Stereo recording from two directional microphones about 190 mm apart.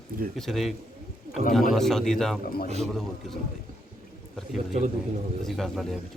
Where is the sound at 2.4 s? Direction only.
50° left (ahead or behind).